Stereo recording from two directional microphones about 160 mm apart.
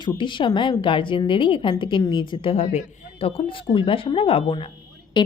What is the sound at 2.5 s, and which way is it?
A woman's voice, 45° left (ahead or behind).